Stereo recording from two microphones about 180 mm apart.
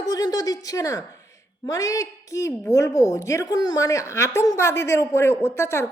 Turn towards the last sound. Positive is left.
turn(degrees=15)  # may be behind; listen again after turning